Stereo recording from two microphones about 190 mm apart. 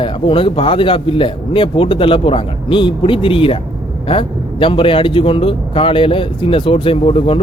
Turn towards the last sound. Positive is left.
turn(degrees=30)  # may be behind; listen again after turning